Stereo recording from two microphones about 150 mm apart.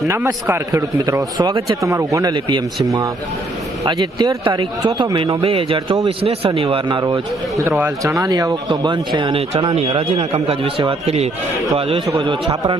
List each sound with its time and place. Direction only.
0.1 s speech: 15° right (ahead or behind); by 7.0 s 35° right (ahead or behind)
7.8 s a man's voice: 20° right (ahead or behind)